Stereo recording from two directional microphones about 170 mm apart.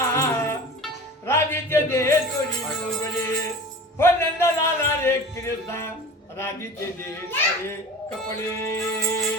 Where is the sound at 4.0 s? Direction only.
15° left (ahead or behind).